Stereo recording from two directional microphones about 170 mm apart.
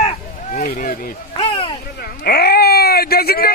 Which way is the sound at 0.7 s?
55° left (ahead or behind).